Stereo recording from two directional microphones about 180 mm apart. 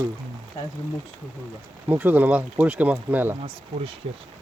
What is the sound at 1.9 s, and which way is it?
Speech, 10° right (ahead or behind).